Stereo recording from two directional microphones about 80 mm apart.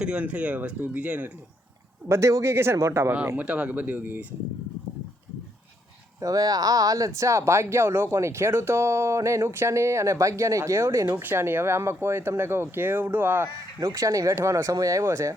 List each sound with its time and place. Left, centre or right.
0.0 s speech: centre
2.0 s speech: right
3.3 s speech: centre
6.1 s speech: right
11.2 s speech: right
13.6 s speech: right